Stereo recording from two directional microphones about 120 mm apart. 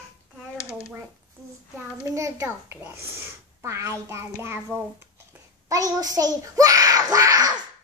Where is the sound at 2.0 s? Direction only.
25° right (ahead or behind).